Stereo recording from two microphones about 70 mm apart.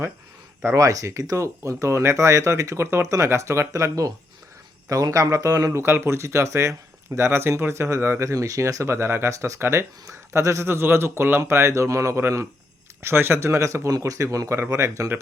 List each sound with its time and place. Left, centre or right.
0.6 s speech: right
5.7 s speech: right
8.3 s speech: right
9.3 s speech: right
9.6 s speech: right
10.1 s speech: right
11.6 s speech: right